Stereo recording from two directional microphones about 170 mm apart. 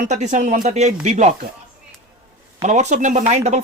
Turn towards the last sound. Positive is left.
turn(degrees=-40)  # may be behind; listen again after turning